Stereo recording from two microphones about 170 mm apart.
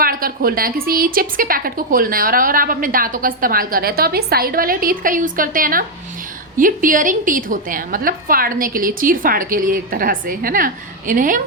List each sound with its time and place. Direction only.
0.0 s a woman's voice: 60° right (ahead or behind)